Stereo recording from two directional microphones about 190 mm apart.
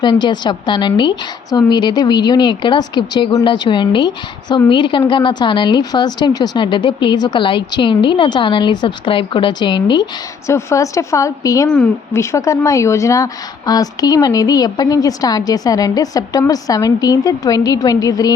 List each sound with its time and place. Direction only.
0.0 s a woman's voice: 25° left (ahead or behind)